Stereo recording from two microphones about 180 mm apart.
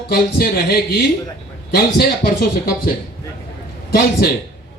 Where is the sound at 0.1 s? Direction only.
60° left (ahead or behind).